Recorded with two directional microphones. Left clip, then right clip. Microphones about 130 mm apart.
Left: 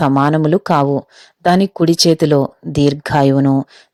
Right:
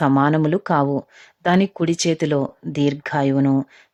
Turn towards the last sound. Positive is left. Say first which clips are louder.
# left 6 dB
turn(degrees=40)  # may be behind; listen again after turning